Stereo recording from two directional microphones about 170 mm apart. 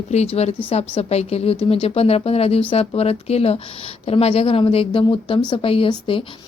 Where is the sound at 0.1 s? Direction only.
40° left (ahead or behind).